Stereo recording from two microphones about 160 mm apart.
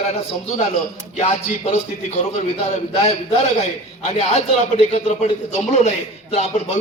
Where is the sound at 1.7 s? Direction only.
45° left (ahead or behind).